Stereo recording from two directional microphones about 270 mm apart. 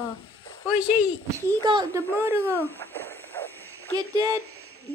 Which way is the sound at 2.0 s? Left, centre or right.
Centre.